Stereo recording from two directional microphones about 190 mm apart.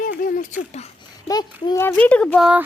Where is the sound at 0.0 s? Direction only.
45° left (ahead or behind).